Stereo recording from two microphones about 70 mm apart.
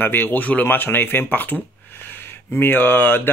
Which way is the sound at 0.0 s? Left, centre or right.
Left.